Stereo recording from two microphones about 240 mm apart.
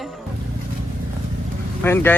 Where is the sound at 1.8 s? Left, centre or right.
Centre.